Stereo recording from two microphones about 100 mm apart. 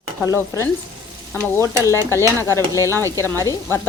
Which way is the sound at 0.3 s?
30° left (ahead or behind).